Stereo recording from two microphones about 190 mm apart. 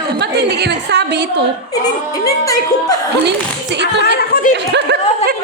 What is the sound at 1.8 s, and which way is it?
Speech, 20° left (ahead or behind).